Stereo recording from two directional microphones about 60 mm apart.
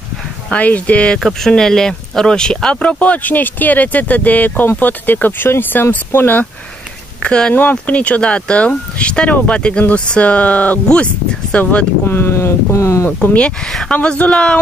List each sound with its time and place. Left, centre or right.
0.5 s speech: left
1.2 s speech: centre; by 6.4 s left
7.2 s speech: centre
12.1 s speech: left
13.0 s speech: left
13.7 s speech: centre
14.0 s speech: centre